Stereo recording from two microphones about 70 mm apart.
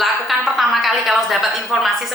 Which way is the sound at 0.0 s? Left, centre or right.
Centre.